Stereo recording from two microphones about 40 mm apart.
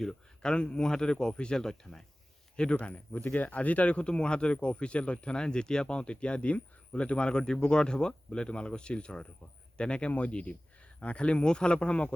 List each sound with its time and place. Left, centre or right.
0.0 s speech: centre
2.6 s speech: left
3.1 s speech: left